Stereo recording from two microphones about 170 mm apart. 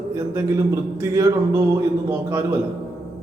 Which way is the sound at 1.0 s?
15° right (ahead or behind).